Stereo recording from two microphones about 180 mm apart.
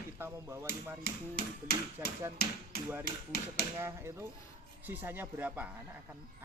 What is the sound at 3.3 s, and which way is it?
Speech, 60° left (ahead or behind).